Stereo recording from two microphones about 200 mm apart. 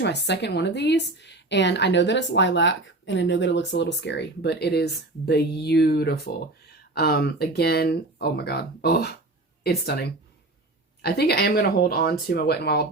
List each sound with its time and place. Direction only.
0.0 s a woman's voice: 60° left (ahead or behind)